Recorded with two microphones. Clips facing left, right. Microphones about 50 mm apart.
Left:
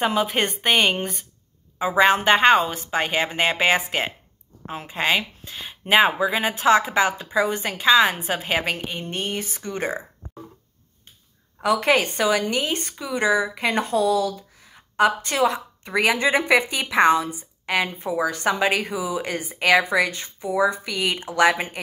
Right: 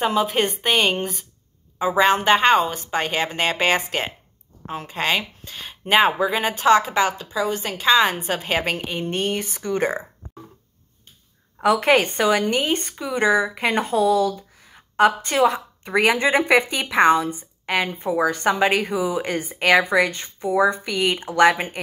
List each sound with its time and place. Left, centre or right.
0.0 s a woman's voice: centre
7.2 s a woman's voice: left
7.6 s a woman's voice: centre
11.6 s a woman's voice: centre